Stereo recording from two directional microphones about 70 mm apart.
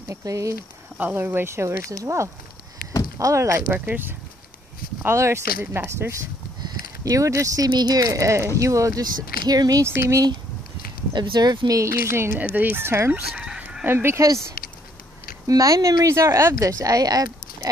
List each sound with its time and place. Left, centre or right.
0.1 s speech: right
0.9 s speech: right
3.7 s speech: right
5.0 s speech: right
5.6 s speech: right
6.6 s a sound: right
7.7 s speech: right
9.8 s speech: right
11.1 s speech: right
12.0 s speech: right
12.4 s speech: right
13.3 s chicken: centre
13.8 s speech: right
14.2 s speech: right